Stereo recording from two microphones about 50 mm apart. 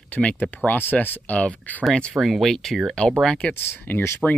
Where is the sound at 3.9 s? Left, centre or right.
Left.